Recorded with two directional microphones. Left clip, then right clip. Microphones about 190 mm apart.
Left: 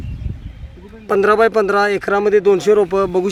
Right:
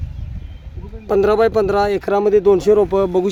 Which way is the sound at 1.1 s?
Centre (ahead or behind).